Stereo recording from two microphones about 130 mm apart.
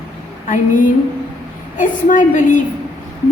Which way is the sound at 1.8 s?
80° left.